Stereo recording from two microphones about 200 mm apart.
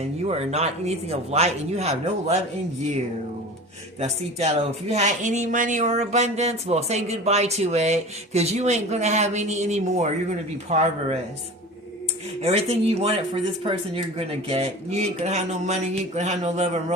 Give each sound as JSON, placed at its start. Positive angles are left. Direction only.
{"t": 0.0, "sound": "speech", "side_deg": -30}
{"t": 4.0, "sound": "speech", "side_deg": -30}
{"t": 12.4, "sound": "speech", "side_deg": -30}